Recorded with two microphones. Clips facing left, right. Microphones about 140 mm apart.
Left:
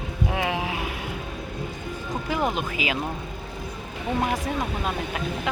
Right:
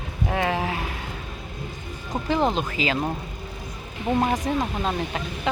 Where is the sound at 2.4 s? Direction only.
30° right (ahead or behind).